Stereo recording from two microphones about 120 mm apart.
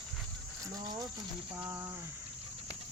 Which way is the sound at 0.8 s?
35° right (ahead or behind).